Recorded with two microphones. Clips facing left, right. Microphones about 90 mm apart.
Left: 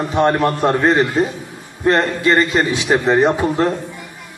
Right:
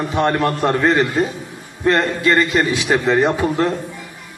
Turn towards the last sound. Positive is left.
turn(degrees=20)  # may be behind; listen again after turning